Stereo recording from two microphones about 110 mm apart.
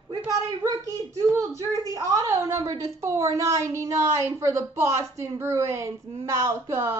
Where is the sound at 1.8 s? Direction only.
30° right (ahead or behind).